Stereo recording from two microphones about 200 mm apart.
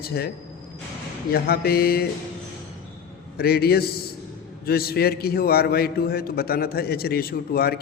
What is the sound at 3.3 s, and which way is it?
A man's voice, 50° left (ahead or behind).